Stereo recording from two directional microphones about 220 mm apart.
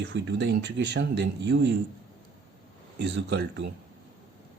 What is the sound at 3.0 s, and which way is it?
Speech, 50° right (ahead or behind).